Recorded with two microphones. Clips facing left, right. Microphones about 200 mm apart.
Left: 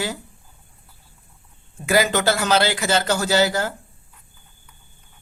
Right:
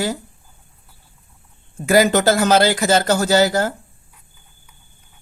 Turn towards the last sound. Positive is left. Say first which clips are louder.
# right 4 dB
turn(degrees=-45)  # may be behind; listen again after turning